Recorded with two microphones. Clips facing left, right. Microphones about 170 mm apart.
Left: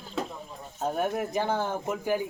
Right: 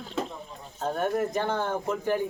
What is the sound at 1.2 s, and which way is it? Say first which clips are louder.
A man's voice: right 1 dB; 10° left (ahead or behind).